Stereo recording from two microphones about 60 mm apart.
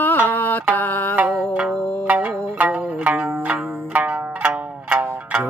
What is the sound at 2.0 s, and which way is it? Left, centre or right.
Music, right.